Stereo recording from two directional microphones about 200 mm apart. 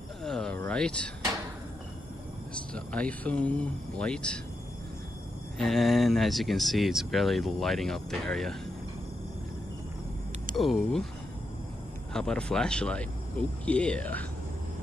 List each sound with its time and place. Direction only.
0.2 s a sound: centre (ahead or behind)
0.6 s speech: 5° left (ahead or behind)
2.7 s speech: 5° left (ahead or behind)
5.6 s speech: centre (ahead or behind)
10.5 s speech: centre (ahead or behind)
12.1 s speech: 5° left (ahead or behind)